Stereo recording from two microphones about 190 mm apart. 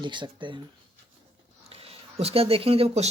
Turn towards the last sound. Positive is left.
turn(degrees=-30)  # may be behind; listen again after turning